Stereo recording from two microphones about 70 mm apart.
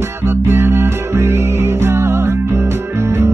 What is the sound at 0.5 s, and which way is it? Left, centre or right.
Music, right.